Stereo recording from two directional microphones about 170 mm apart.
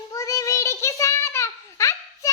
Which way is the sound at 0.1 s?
20° left (ahead or behind).